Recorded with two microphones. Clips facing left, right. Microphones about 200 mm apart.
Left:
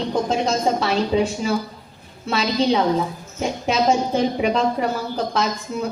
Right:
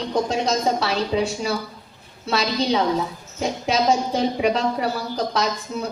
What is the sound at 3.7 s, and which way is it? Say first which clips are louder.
A woman's voice: left 1 dB; 35° right (ahead or behind).